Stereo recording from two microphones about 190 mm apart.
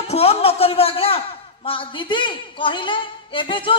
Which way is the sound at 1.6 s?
25° left (ahead or behind).